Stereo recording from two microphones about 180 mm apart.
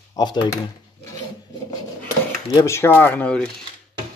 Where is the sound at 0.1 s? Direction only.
25° left (ahead or behind).